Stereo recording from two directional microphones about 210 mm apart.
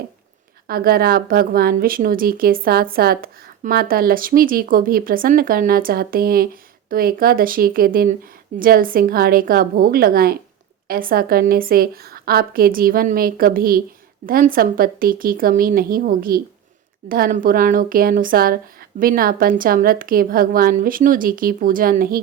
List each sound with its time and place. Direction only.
0.7 s speech: 45° right (ahead or behind)